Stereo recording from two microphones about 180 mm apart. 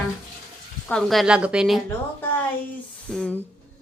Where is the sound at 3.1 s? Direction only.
5° left (ahead or behind).